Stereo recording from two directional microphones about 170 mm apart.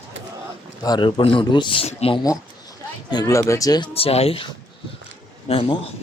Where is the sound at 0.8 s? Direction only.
25° left (ahead or behind).